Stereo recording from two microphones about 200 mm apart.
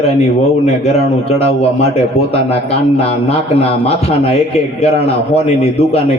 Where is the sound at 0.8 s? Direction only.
30° left (ahead or behind).